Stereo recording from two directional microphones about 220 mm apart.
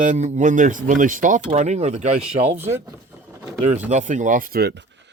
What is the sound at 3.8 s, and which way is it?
Speech, 35° right (ahead or behind).